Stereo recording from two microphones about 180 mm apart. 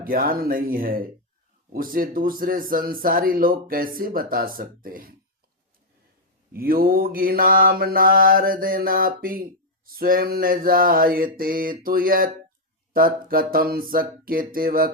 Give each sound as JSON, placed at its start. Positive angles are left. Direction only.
{"t": 0.0, "sound": "mantra", "side_deg": -55}
{"t": 6.5, "sound": "mantra", "side_deg": -55}